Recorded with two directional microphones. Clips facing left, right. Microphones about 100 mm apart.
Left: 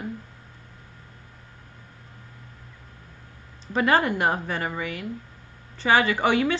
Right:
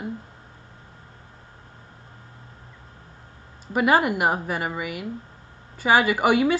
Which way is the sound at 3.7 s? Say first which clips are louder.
Right 2 dB; 10° right (ahead or behind).